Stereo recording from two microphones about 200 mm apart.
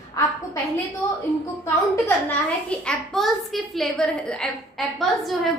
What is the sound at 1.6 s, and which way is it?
A child's voice, 10° left (ahead or behind).